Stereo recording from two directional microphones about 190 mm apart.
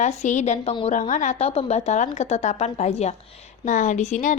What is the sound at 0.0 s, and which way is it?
A woman's voice, 40° left (ahead or behind).